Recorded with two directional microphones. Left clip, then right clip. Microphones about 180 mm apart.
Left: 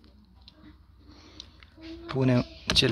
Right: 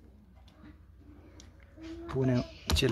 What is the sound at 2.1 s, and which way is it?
Speech, 25° left (ahead or behind).